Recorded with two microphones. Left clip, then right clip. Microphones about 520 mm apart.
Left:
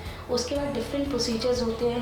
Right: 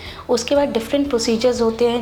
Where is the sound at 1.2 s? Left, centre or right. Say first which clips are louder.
Right 9 dB; right.